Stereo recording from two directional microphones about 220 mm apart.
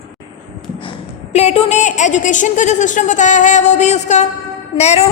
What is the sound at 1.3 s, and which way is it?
A woman's voice, 30° left (ahead or behind).